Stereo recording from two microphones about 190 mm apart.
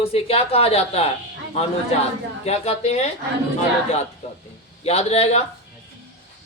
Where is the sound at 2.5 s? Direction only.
35° left (ahead or behind).